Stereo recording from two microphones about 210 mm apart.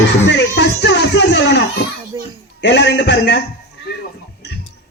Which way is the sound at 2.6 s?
55° left (ahead or behind).